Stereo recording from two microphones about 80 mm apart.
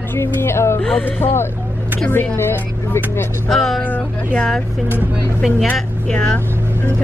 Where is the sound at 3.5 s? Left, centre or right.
Centre.